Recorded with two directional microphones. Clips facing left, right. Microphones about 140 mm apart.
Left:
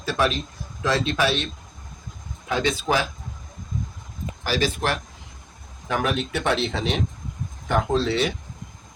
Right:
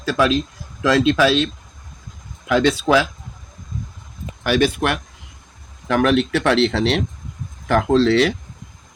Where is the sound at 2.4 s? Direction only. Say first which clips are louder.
Right 7 dB; 80° right.